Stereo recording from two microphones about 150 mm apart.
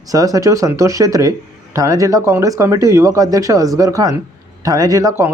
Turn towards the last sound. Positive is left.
turn(degrees=-20)  # may be behind; listen again after turning